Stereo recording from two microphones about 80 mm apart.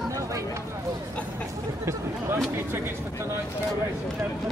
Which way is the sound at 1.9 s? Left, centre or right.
Right.